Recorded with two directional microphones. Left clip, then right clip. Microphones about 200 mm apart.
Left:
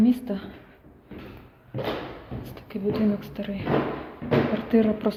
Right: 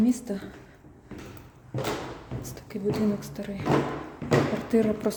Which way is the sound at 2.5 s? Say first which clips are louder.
Left 2 dB; 15° right (ahead or behind).